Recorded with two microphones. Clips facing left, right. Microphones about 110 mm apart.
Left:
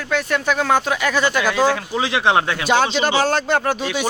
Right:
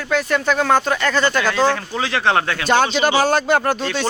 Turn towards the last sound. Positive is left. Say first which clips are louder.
# right 1 dB
turn(degrees=5)  # may be behind; listen again after turning